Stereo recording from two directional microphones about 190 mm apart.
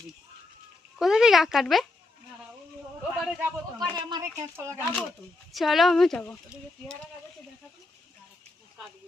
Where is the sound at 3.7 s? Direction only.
20° right (ahead or behind).